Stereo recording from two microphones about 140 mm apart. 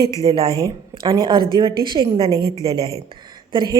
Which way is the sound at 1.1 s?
25° right (ahead or behind).